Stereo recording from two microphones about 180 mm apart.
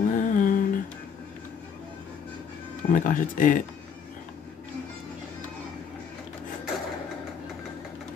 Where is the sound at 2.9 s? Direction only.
45° left (ahead or behind).